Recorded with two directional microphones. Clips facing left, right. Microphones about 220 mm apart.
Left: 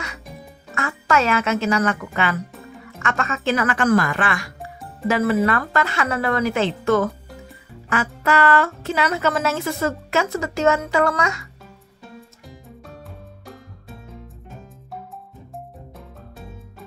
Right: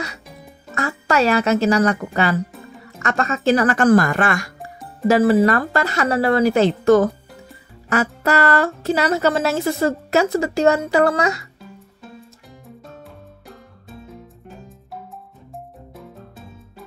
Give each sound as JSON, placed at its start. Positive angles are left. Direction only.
{"t": 0.7, "sound": "a woman's voice", "side_deg": -35}
{"t": 2.5, "sound": "music", "side_deg": 0}
{"t": 3.0, "sound": "speech", "side_deg": -40}
{"t": 4.6, "sound": "music", "side_deg": 0}
{"t": 5.0, "sound": "speech", "side_deg": -35}
{"t": 12.6, "sound": "music", "side_deg": 0}
{"t": 15.5, "sound": "music", "side_deg": 0}